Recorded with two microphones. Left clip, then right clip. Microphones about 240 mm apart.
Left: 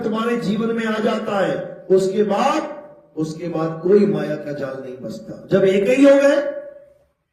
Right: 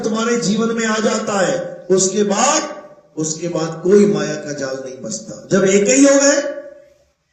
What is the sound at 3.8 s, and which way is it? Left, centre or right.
Speech, right.